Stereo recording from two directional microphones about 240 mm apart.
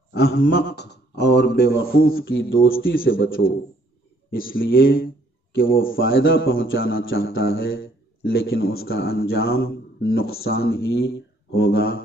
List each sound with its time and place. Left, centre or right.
0.1 s a man's voice: left
2.2 s a man's voice: left
4.4 s a man's voice: left
5.8 s a man's voice: left
7.5 s a sound: left
8.3 s a man's voice: left